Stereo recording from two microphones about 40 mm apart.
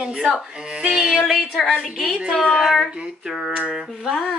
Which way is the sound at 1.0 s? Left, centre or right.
Centre.